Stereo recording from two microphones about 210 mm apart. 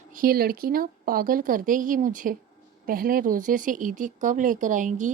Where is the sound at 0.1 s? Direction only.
45° right (ahead or behind).